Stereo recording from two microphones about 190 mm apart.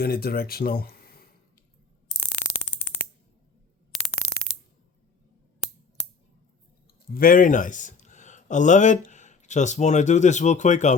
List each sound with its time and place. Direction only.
0.0 s speech: 55° left (ahead or behind)
7.1 s speech: 50° left (ahead or behind)